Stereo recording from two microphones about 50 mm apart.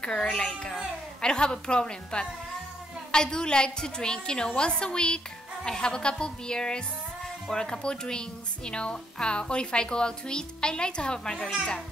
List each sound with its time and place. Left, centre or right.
0.2 s a woman's voice: centre